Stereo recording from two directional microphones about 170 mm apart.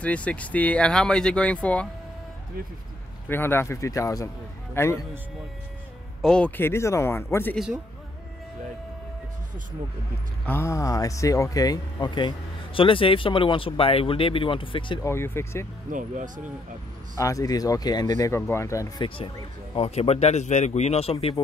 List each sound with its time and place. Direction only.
0.0 s speech: 5° left (ahead or behind)
3.3 s speech: 15° left (ahead or behind)
6.2 s speech: 5° left (ahead or behind)
10.4 s speech: 15° left (ahead or behind); by 15.0 s 30° left (ahead or behind)
15.0 s speech: 15° left (ahead or behind)
15.9 s speech: 50° right (ahead or behind)
17.2 s speech: 20° left (ahead or behind)
19.0 s a man's voice: 30° left (ahead or behind)